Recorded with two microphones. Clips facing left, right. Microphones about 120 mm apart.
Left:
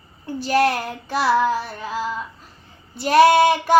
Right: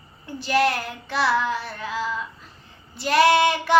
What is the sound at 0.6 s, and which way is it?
Child singing, 40° left (ahead or behind).